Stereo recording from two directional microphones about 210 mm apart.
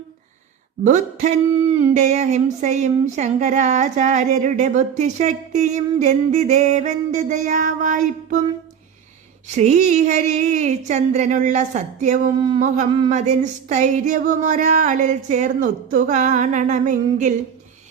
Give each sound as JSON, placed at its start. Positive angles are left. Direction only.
{"t": 0.9, "sound": "speech", "side_deg": -35}
{"t": 9.6, "sound": "speech", "side_deg": -35}